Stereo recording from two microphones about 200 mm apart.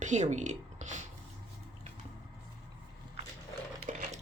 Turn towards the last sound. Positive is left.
turn(degrees=-40)  # may be behind; listen again after turning